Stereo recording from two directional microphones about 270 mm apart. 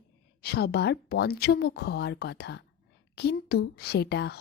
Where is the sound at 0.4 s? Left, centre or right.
Left.